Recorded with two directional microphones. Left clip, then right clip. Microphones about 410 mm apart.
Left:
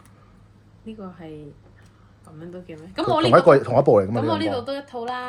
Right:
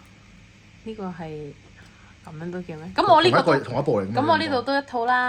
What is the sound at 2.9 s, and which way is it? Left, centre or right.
Speech, right.